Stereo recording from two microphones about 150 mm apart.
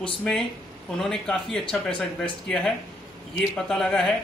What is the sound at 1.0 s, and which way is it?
Speech, 5° left (ahead or behind).